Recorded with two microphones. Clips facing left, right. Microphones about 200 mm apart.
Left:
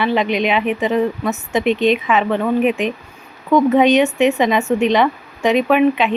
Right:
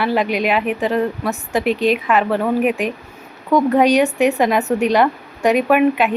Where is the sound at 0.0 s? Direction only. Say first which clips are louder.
Left 1 dB; 5° right (ahead or behind).